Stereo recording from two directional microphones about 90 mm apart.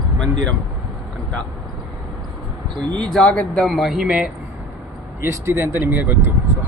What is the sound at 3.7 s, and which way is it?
Speech, centre (ahead or behind).